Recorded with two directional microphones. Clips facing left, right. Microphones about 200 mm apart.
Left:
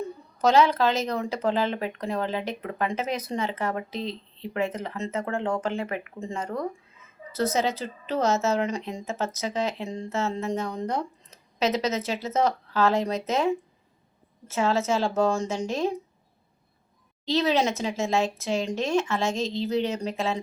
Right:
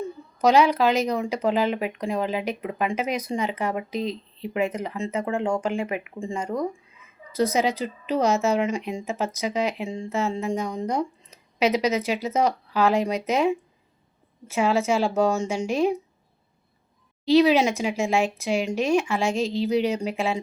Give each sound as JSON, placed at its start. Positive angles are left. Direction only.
{"t": 0.4, "sound": "speech", "side_deg": -10}
{"t": 3.9, "sound": "speech", "side_deg": 30}
{"t": 4.5, "sound": "speech", "side_deg": -15}
{"t": 17.2, "sound": "speech", "side_deg": -10}